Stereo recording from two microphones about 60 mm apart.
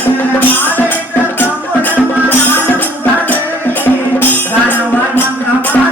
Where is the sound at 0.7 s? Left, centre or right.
Left.